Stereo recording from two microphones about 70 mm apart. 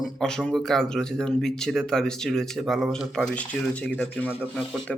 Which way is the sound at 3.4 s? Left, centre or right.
Centre.